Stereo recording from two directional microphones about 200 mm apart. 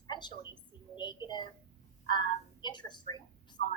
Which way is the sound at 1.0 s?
20° left (ahead or behind).